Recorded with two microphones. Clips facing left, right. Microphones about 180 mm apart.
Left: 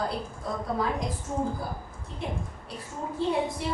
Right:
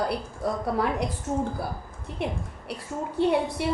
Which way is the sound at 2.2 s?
70° right (ahead or behind).